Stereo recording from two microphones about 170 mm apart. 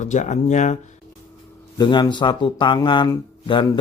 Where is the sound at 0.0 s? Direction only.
45° left (ahead or behind).